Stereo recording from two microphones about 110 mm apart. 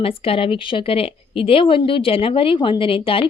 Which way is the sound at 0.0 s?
55° left (ahead or behind).